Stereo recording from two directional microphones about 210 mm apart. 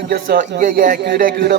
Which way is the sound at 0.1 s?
45° right (ahead or behind).